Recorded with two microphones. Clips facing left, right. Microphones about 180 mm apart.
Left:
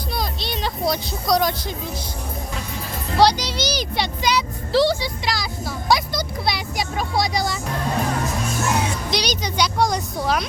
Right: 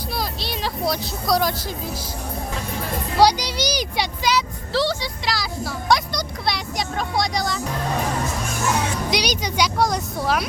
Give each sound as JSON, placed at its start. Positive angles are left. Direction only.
{"t": 0.2, "sound": "a sound", "side_deg": -5}
{"t": 3.2, "sound": "a woman's voice", "side_deg": -10}
{"t": 4.7, "sound": "speech", "side_deg": 15}
{"t": 5.2, "sound": "speech", "side_deg": 0}
{"t": 9.0, "sound": "a woman's voice", "side_deg": -10}